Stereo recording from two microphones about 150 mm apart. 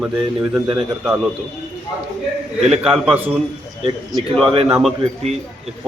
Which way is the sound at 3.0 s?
10° right (ahead or behind).